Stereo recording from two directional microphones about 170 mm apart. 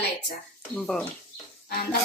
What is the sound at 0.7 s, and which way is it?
Speech, 5° left (ahead or behind).